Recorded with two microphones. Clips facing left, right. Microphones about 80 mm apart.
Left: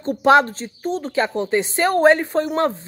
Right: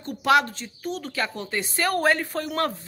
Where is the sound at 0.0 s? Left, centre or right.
Left.